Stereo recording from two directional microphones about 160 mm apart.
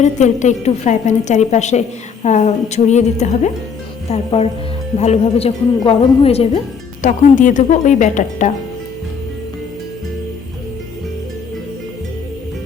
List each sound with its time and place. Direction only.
0.0 s a woman's voice: 50° left (ahead or behind)
7.0 s a woman's voice: 50° left (ahead or behind)